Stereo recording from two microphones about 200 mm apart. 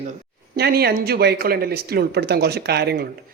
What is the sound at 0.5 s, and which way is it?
Speech, 50° right (ahead or behind).